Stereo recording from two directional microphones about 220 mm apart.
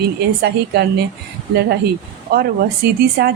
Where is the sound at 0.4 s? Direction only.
50° right (ahead or behind).